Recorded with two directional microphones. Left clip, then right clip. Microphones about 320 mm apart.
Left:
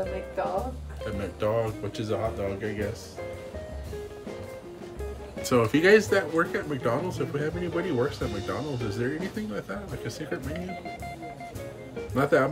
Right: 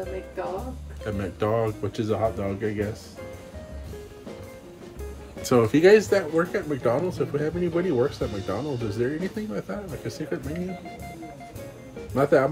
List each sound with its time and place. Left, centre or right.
1.0 s speech: centre
5.4 s speech: centre
12.0 s speech: centre